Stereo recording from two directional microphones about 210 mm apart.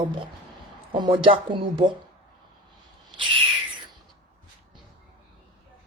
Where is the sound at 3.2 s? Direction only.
25° right (ahead or behind).